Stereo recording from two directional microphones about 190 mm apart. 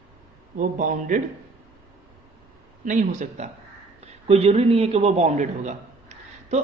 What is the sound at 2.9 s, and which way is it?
A man's voice, 40° right (ahead or behind).